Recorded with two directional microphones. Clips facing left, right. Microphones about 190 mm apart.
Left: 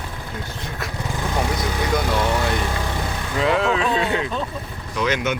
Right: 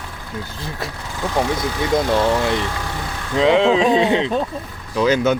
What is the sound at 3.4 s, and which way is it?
Speech, 25° right (ahead or behind).